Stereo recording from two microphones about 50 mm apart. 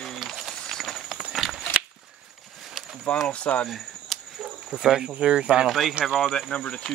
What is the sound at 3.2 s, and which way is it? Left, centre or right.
Speech, left.